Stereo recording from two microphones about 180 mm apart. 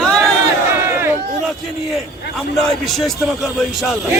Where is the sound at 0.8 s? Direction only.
15° right (ahead or behind).